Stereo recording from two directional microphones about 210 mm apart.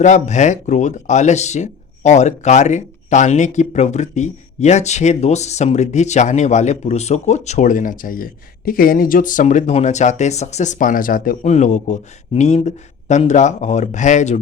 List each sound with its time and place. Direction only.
0.0 s speech: 35° left (ahead or behind)